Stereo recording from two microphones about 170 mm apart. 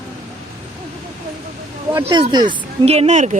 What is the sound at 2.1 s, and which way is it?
Speech, 25° right (ahead or behind).